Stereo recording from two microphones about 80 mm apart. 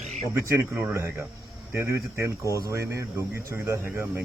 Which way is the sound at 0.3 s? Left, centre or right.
Right.